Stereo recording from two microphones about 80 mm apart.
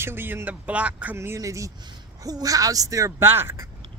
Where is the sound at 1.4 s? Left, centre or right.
Right.